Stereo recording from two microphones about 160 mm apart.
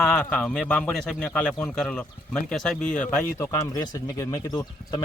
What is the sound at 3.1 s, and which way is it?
Speech, 15° left (ahead or behind).